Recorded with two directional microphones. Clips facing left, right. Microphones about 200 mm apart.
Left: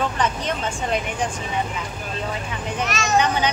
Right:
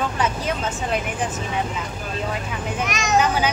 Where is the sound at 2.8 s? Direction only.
15° right (ahead or behind).